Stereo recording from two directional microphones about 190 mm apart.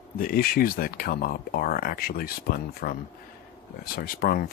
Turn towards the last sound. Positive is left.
turn(degrees=50)  # may be behind; listen again after turning